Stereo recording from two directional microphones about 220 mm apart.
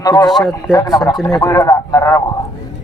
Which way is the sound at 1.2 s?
15° left (ahead or behind).